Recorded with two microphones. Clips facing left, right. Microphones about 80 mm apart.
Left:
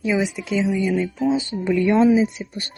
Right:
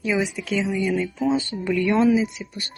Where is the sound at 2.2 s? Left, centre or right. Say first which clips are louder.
Left 4 dB; left.